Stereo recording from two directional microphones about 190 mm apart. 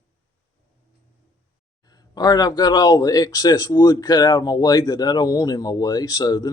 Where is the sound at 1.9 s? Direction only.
20° left (ahead or behind).